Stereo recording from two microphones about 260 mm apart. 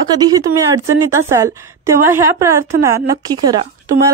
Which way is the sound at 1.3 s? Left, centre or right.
Centre.